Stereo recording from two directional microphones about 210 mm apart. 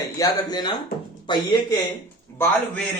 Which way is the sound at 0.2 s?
20° left (ahead or behind).